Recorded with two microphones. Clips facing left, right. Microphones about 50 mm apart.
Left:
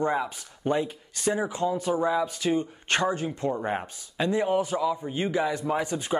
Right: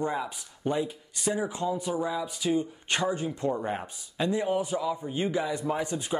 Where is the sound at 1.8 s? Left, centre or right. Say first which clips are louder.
Left 5 dB; left.